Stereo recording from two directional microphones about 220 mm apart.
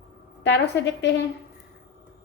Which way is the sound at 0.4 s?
50° left (ahead or behind).